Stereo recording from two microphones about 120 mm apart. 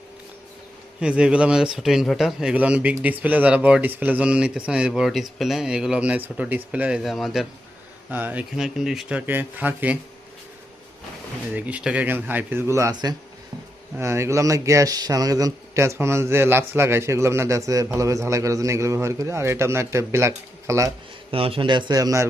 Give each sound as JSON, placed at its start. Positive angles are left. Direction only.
{"t": 0.9, "sound": "speech", "side_deg": -10}
{"t": 8.1, "sound": "speech", "side_deg": -15}
{"t": 8.5, "sound": "speech", "side_deg": -5}
{"t": 11.5, "sound": "speech", "side_deg": -10}
{"t": 13.9, "sound": "a man's voice", "side_deg": -20}
{"t": 21.2, "sound": "a man's voice", "side_deg": -50}